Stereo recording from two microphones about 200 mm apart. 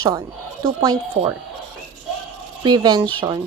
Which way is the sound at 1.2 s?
35° right (ahead or behind).